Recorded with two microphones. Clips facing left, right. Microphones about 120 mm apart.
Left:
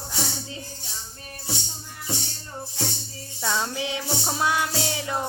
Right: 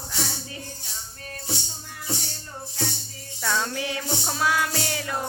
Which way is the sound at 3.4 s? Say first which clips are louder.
Even; 20° left (ahead or behind).